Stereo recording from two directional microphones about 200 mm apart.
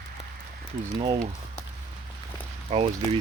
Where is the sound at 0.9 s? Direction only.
20° right (ahead or behind).